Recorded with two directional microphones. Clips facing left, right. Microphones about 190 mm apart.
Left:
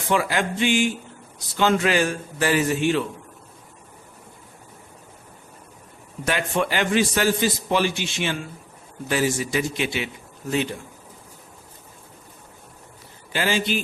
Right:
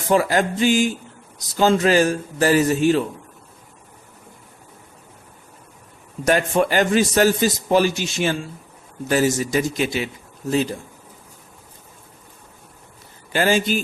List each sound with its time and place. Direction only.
0.1 s a man's voice: 40° right (ahead or behind)
6.2 s a man's voice: 45° right (ahead or behind)
13.3 s a man's voice: 45° right (ahead or behind)